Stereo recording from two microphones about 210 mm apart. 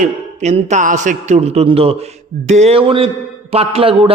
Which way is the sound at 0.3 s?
35° right (ahead or behind).